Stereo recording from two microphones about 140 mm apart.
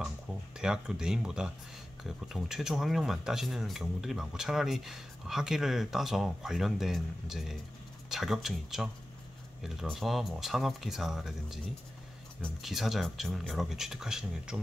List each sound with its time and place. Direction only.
0.6 s speech: 5° right (ahead or behind)
12.6 s speech: centre (ahead or behind)